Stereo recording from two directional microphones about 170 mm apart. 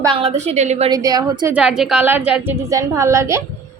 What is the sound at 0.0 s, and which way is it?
Speech, 30° right (ahead or behind).